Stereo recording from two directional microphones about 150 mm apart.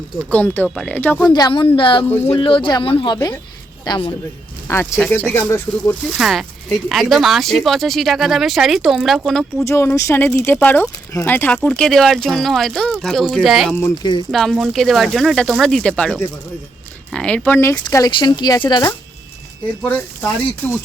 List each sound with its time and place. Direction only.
0.3 s speech: 10° left (ahead or behind)
1.3 s speech: 30° left (ahead or behind)
4.7 s speech: 15° left (ahead or behind)
6.1 s speech: centre (ahead or behind)
9.6 s speech: 20° left (ahead or behind); by 13.7 s centre (ahead or behind)
14.0 s speech: 30° left (ahead or behind)
14.3 s speech: centre (ahead or behind); by 17.7 s 15° left (ahead or behind)
17.8 s speech: 25° left (ahead or behind)
19.8 s speech: 10° left (ahead or behind)